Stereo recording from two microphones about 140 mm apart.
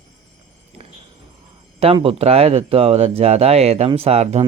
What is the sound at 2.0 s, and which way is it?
Speech, 45° right (ahead or behind).